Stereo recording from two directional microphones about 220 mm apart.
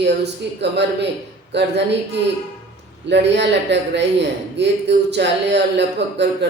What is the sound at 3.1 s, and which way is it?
A man's voice, 50° right (ahead or behind).